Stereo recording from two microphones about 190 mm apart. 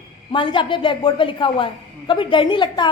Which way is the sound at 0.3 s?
25° left (ahead or behind).